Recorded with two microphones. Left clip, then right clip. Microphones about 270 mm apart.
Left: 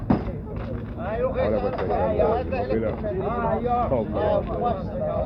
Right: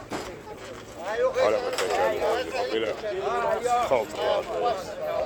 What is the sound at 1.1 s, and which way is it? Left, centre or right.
Speech, right.